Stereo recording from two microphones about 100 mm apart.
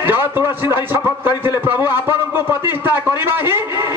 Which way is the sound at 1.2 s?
20° right (ahead or behind).